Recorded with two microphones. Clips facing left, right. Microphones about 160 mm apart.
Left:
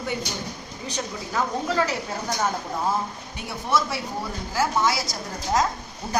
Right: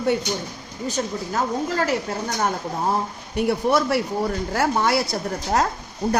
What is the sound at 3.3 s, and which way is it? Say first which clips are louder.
A woman's voice: right 7 dB; 60° right (ahead or behind).